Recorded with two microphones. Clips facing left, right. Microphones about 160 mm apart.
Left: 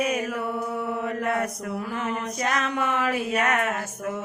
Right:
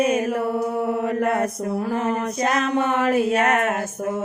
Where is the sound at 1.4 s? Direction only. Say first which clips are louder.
Right 6 dB; 30° right (ahead or behind).